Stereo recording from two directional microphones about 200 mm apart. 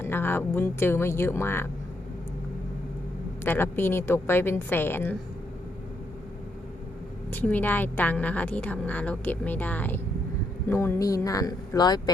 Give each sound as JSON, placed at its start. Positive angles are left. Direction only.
{"t": 0.0, "sound": "a woman's voice", "side_deg": 10}
{"t": 3.4, "sound": "a woman's voice", "side_deg": 10}
{"t": 7.3, "sound": "a woman's voice", "side_deg": 10}